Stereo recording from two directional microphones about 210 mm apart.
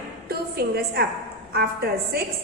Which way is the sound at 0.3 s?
45° right (ahead or behind).